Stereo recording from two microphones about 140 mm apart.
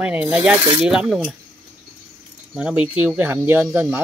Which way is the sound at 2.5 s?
5° right (ahead or behind).